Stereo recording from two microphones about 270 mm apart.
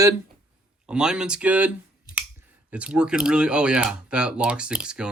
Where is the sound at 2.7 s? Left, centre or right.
Centre.